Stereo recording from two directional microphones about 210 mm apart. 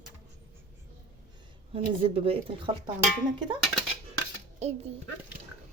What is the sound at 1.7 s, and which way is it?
Speech, 25° right (ahead or behind).